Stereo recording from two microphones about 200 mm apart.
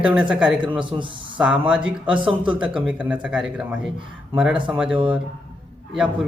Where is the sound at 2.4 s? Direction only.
5° right (ahead or behind).